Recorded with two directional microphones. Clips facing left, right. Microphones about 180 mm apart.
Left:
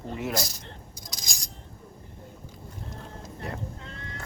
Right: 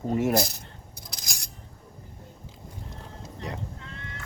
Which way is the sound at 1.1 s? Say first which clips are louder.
Even; 65° right (ahead or behind).